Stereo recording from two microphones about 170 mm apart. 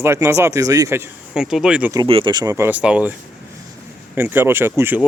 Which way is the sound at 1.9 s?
30° right (ahead or behind).